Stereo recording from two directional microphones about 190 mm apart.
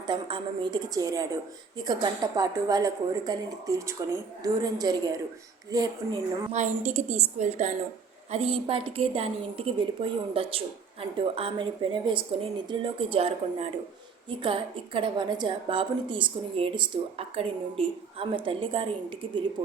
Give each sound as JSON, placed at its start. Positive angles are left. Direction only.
{"t": 0.1, "sound": "a woman's voice", "side_deg": -25}
{"t": 6.5, "sound": "a woman's voice", "side_deg": -35}